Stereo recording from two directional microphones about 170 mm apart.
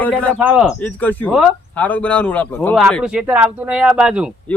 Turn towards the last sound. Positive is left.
turn(degrees=-5)  # may be behind; listen again after turning